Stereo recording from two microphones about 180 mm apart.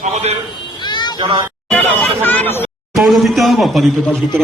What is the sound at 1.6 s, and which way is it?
Speech, 5° left (ahead or behind).